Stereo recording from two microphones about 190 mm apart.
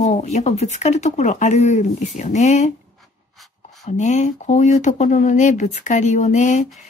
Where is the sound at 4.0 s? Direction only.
40° left (ahead or behind).